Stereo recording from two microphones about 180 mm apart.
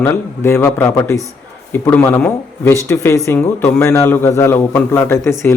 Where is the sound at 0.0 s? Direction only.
10° left (ahead or behind).